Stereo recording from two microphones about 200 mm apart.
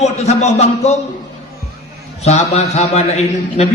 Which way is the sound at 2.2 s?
35° left (ahead or behind).